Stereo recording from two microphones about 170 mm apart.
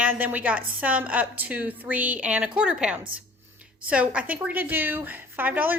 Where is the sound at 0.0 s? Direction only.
10° right (ahead or behind).